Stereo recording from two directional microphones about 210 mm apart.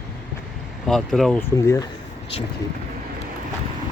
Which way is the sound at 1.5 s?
15° left (ahead or behind).